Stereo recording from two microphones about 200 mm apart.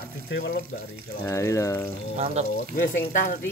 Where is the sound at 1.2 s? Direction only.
15° left (ahead or behind).